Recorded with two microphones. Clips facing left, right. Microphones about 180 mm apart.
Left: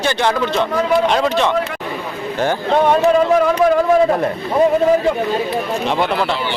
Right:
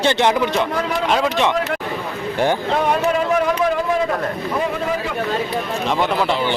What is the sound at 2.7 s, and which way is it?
Speech, 30° left (ahead or behind).